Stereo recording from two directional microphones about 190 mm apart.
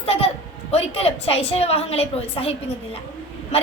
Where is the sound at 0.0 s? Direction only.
30° left (ahead or behind).